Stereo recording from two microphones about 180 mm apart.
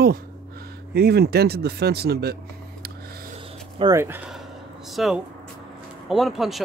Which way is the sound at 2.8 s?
60° right (ahead or behind).